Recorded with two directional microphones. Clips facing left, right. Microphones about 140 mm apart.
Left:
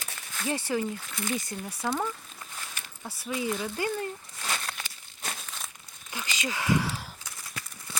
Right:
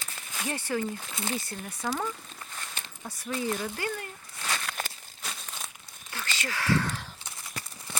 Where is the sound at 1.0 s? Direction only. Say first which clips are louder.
Left 1 dB; 30° right (ahead or behind).